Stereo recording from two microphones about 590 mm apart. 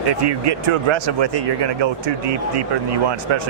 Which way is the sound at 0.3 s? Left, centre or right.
Right.